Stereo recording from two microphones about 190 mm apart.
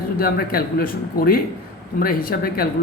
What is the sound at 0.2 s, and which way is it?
Speech, 50° left (ahead or behind).